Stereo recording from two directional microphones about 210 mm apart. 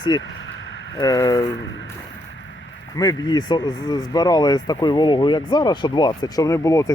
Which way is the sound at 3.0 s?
20° left (ahead or behind).